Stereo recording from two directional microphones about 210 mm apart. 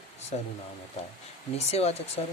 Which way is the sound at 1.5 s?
30° left (ahead or behind).